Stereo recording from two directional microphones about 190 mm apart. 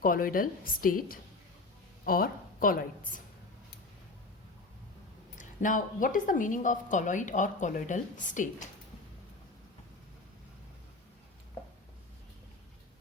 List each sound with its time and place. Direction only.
0.0 s a woman's voice: 45° left (ahead or behind)
5.4 s a woman's voice: 45° left (ahead or behind)